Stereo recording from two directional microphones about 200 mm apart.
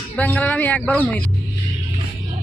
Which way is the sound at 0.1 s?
5° left (ahead or behind).